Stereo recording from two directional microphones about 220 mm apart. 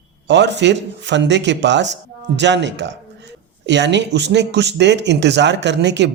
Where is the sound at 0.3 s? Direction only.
50° right (ahead or behind).